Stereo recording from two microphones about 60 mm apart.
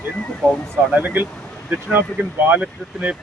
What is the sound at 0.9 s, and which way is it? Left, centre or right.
Speech, right.